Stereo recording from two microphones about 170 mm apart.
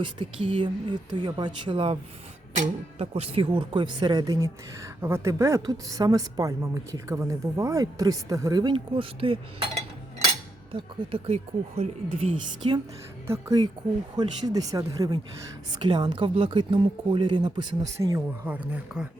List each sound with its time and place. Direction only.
0.0 s a woman's voice: 30° right (ahead or behind)
3.0 s a woman's voice: 35° right (ahead or behind)
10.7 s a woman's voice: 30° right (ahead or behind)
13.2 s a woman's voice: 20° right (ahead or behind)